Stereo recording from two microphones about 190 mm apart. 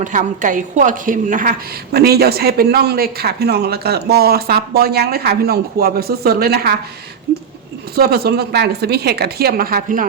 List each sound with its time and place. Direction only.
0.0 s a woman's voice: 40° right (ahead or behind)
7.9 s a woman's voice: 55° right (ahead or behind)